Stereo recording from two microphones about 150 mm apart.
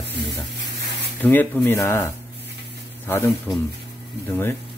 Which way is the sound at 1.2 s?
10° left (ahead or behind).